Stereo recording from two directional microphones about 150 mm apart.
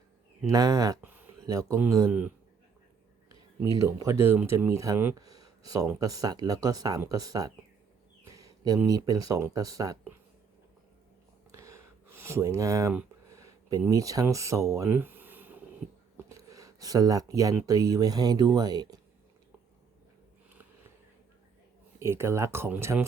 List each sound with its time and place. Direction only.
0.4 s speech: 25° right (ahead or behind)
1.0 s a sound: 10° right (ahead or behind)
1.8 s speech: 15° right (ahead or behind)
3.6 s speech: 25° right (ahead or behind)
8.2 s a sound: 25° right (ahead or behind)
8.9 s speech: 25° right (ahead or behind)
11.5 s a sound: 20° right (ahead or behind)
17.7 s speech: 25° right (ahead or behind)
21.9 s speech: 15° right (ahead or behind)